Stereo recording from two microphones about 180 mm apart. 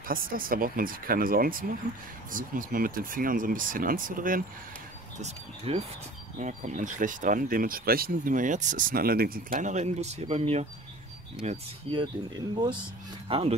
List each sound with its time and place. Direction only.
0.1 s speech: 50° right (ahead or behind)
5.2 s speech: 35° right (ahead or behind)
13.3 s speech: 30° right (ahead or behind)